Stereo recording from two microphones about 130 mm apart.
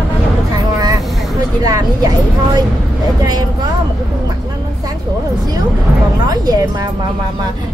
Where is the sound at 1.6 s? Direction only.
30° right (ahead or behind).